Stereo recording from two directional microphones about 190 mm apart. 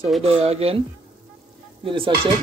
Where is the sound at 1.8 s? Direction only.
25° right (ahead or behind).